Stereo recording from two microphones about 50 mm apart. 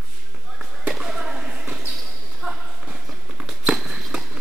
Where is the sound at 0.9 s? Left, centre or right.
Centre.